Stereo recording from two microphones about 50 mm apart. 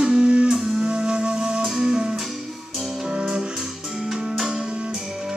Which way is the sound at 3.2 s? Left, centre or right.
Centre.